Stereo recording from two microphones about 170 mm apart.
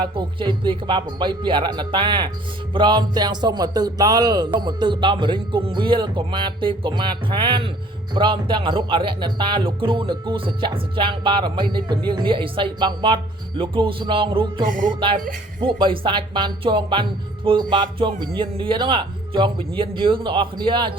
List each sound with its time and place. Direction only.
0.0 s speech: 25° right (ahead or behind)
13.6 s music: 30° right (ahead or behind)
14.7 s music: 50° right (ahead or behind)
15.6 s speech: 30° right (ahead or behind)